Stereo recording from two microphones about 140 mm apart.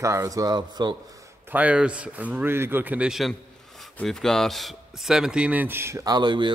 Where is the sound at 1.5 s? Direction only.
10° right (ahead or behind).